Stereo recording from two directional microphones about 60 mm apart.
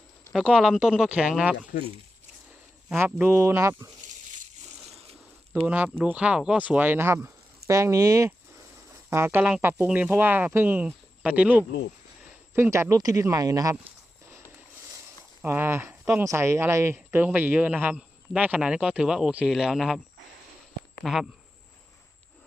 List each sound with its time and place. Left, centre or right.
0.3 s speech: centre
3.2 s speech: right
3.4 s speech: right
5.6 s speech: right
6.7 s speech: right
8.9 s a sound: right
9.4 s speech: right
9.8 s speech: right
11.2 s speech: right
12.7 s speech: right
13.0 s speech: right
15.4 s speech: right
16.2 s speech: right; by 20.0 s centre
21.0 s speech: centre